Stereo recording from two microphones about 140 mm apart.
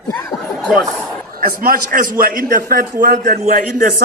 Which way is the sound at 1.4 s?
90° right.